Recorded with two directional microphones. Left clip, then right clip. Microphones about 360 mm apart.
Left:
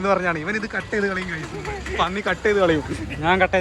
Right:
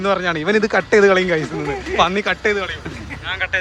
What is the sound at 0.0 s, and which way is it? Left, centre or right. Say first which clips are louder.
Speech: right 3 dB; centre.